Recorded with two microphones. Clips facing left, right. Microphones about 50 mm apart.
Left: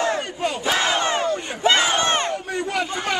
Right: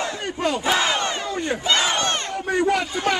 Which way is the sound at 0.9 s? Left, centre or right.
Left.